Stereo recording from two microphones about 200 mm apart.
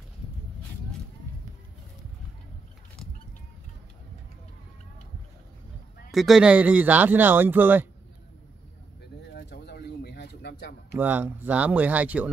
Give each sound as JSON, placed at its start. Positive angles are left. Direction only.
{"t": 6.1, "sound": "speech", "side_deg": 0}
{"t": 9.3, "sound": "bird", "side_deg": 55}
{"t": 11.0, "sound": "speech", "side_deg": -10}